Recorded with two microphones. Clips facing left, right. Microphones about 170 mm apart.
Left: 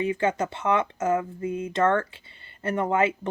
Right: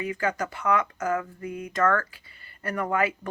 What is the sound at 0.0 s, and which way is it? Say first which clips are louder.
Speech: left 4 dB; 25° left (ahead or behind).